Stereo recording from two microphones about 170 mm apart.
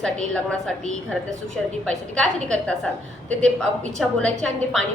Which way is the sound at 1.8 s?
5° left (ahead or behind).